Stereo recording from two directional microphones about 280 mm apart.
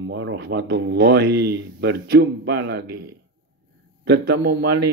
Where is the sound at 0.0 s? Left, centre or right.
Right.